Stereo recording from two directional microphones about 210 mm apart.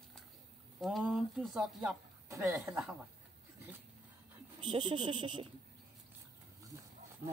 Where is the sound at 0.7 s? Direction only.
Centre (ahead or behind).